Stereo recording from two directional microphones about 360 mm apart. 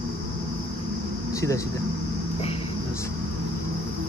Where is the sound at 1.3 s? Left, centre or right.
Centre.